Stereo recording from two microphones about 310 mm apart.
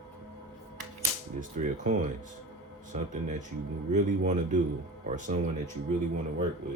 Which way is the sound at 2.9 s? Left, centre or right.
Right.